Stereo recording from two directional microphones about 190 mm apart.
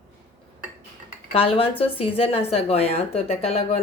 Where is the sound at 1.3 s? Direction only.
30° left (ahead or behind).